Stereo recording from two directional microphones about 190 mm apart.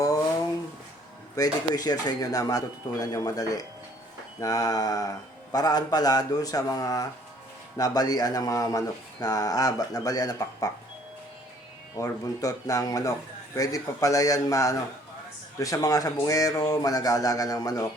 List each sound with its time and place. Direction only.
1.4 s speech: 20° left (ahead or behind)
11.9 s speech: 20° left (ahead or behind)